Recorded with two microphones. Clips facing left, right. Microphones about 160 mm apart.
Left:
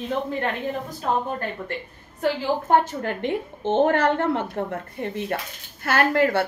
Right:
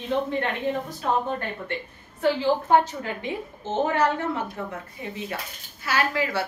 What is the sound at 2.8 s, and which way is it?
A woman's voice, 60° left (ahead or behind).